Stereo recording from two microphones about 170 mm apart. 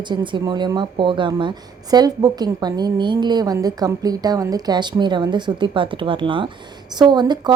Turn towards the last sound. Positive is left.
turn(degrees=-25)  # may be behind; listen again after turning